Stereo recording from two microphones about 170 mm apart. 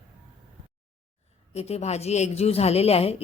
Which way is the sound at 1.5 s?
40° left (ahead or behind).